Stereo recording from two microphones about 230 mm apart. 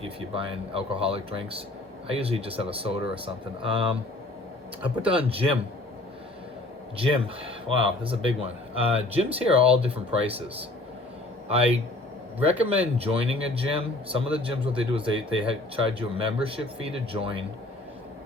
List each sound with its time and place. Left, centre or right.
0.2 s speech: right
5.0 s speech: right
7.0 s speech: right
10.1 s speech: centre
11.4 s speech: right